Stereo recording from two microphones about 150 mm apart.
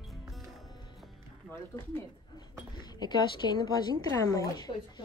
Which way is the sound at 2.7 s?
30° left (ahead or behind).